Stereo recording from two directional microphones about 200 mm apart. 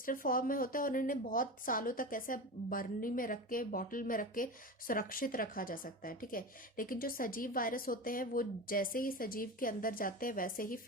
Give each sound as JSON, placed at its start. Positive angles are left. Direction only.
{"t": 0.0, "sound": "speech", "side_deg": 45}